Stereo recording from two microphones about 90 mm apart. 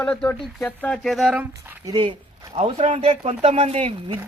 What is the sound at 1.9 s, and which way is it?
Speech, 65° right (ahead or behind).